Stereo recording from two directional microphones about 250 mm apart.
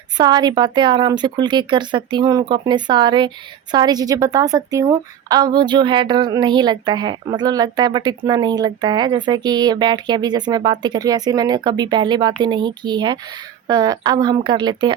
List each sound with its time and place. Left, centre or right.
0.2 s speech: centre